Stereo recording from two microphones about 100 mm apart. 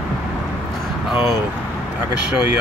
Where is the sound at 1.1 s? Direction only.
5° right (ahead or behind).